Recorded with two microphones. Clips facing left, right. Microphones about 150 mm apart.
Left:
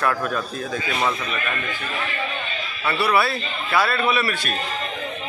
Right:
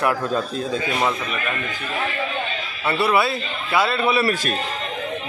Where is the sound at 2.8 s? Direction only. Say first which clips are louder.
Right 1 dB; 25° right (ahead or behind).